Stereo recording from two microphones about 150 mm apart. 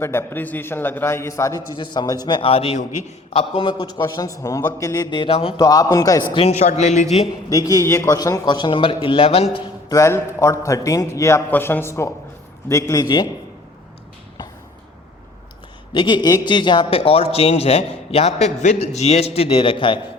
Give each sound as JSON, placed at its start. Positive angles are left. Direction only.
{"t": 0.0, "sound": "a man's voice", "side_deg": 15}
{"t": 4.0, "sound": "a man's voice", "side_deg": 20}
{"t": 5.1, "sound": "a man's voice", "side_deg": 35}
{"t": 5.5, "sound": "a man's voice", "side_deg": 25}
{"t": 6.3, "sound": "speech", "side_deg": 45}
{"t": 7.5, "sound": "a man's voice", "side_deg": 20}
{"t": 9.9, "sound": "a man's voice", "side_deg": 20}
{"t": 15.9, "sound": "a man's voice", "side_deg": 30}